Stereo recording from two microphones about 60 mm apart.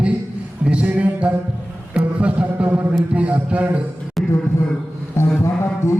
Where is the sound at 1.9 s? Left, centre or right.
Centre.